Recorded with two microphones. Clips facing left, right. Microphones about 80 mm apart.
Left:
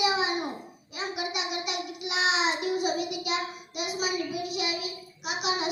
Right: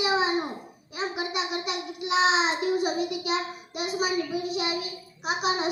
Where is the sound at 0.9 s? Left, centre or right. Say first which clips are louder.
Right 3 dB; right.